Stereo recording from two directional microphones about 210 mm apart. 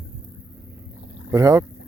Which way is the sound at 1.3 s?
15° right (ahead or behind).